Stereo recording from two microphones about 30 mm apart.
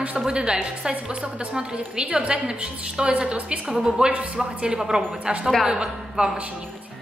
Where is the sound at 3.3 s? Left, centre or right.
Right.